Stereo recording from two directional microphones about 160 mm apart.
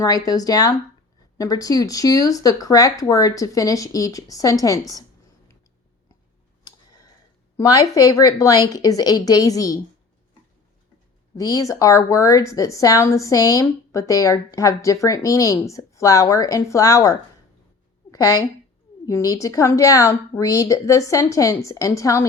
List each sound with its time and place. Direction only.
0.0 s a woman's voice: 20° left (ahead or behind)
7.5 s a woman's voice: 20° left (ahead or behind)
11.3 s a woman's voice: 20° left (ahead or behind)